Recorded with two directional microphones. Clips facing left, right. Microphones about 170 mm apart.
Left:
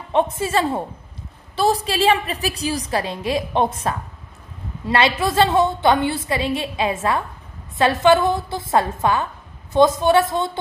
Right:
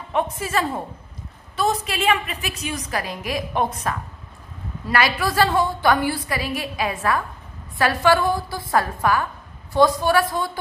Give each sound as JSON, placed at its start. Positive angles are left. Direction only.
{"t": 0.1, "sound": "a woman's voice", "side_deg": 30}